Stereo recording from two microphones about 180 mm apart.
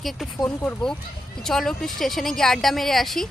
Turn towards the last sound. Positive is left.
turn(degrees=0)  # may be behind; listen again after turning